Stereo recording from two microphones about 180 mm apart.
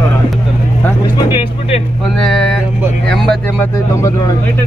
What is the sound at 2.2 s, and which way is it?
Speech, 5° left (ahead or behind).